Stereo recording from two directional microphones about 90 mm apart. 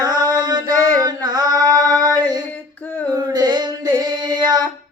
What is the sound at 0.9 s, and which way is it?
Female singing, 45° right (ahead or behind).